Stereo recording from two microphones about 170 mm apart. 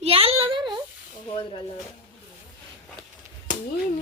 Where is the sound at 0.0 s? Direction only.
35° right (ahead or behind).